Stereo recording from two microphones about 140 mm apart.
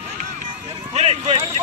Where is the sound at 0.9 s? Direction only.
50° right (ahead or behind).